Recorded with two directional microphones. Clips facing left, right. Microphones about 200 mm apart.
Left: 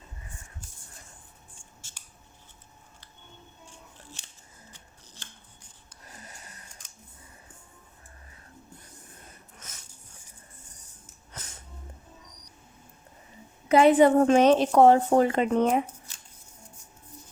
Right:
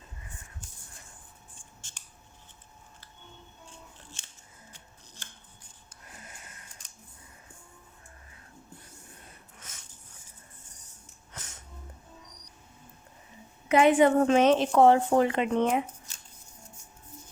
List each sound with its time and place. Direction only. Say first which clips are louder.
1.8 s scissors: even; 10° left (ahead or behind)
13.7 s a woman's voice: left 3 dB; 35° left (ahead or behind)